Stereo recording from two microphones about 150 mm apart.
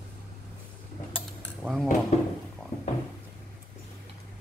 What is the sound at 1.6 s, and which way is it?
Speech, centre (ahead or behind).